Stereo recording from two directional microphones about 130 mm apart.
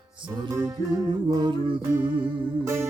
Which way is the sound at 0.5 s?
25° right (ahead or behind).